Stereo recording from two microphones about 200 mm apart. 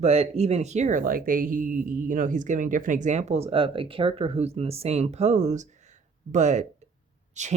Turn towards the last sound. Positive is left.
turn(degrees=-35)  # may be behind; listen again after turning